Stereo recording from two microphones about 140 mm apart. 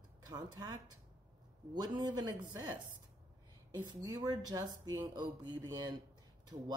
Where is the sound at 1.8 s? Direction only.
30° right (ahead or behind).